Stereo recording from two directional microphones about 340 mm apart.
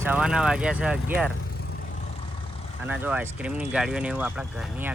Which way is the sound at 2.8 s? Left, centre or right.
Centre.